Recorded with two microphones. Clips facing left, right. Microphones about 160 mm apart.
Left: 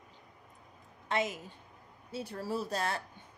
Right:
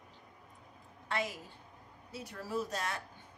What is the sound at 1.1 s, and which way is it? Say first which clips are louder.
Speech: left 4 dB; 20° left (ahead or behind).